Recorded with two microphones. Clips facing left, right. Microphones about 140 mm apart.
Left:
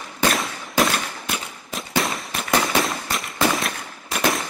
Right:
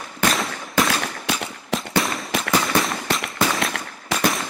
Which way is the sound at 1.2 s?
90° right.